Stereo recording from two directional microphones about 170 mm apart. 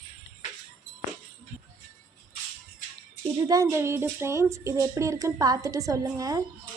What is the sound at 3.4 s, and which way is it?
A woman's voice, 20° right (ahead or behind).